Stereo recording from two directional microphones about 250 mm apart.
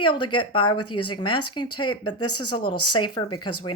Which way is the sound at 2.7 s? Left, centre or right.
Left.